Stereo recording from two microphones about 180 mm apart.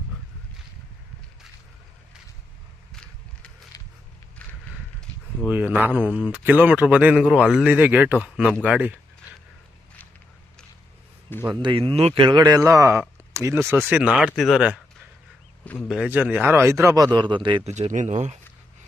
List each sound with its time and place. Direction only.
2.9 s vehicle: 5° left (ahead or behind)
3.7 s a sound: 20° left (ahead or behind)
5.5 s speech: 10° right (ahead or behind)
11.3 s speech: 10° left (ahead or behind)
11.6 s speech: 30° right (ahead or behind); by 14.8 s 5° right (ahead or behind)
15.6 s speech: 10° left (ahead or behind)
15.9 s speech: 5° right (ahead or behind); by 17.7 s 25° right (ahead or behind)
17.7 s speech: 40° right (ahead or behind)